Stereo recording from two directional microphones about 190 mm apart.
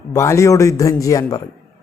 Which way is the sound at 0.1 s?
15° left (ahead or behind).